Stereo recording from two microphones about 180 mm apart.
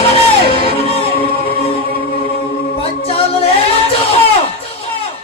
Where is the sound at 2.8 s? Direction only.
35° left (ahead or behind).